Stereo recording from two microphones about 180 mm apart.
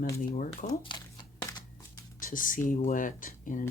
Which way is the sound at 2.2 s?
50° left (ahead or behind).